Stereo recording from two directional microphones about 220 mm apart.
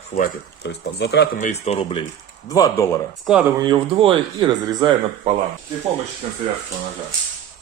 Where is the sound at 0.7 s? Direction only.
50° left (ahead or behind).